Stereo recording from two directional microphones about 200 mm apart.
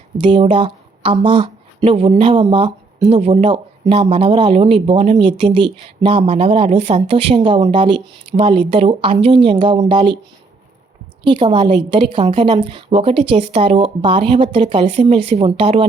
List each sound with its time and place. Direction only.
0.2 s speech: 25° right (ahead or behind)
11.2 s speech: 25° right (ahead or behind)